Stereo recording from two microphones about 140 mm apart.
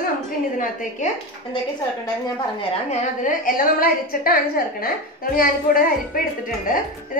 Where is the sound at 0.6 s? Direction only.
70° left (ahead or behind).